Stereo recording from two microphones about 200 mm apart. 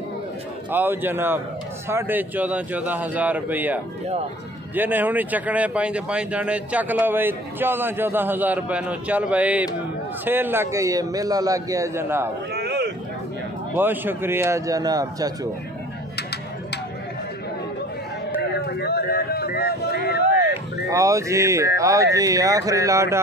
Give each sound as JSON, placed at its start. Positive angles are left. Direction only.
{"t": 0.7, "sound": "speech", "side_deg": -10}
{"t": 12.5, "sound": "a sound", "side_deg": -55}
{"t": 13.7, "sound": "speech", "side_deg": -10}
{"t": 18.7, "sound": "speech", "side_deg": 55}
{"t": 20.9, "sound": "speech", "side_deg": -15}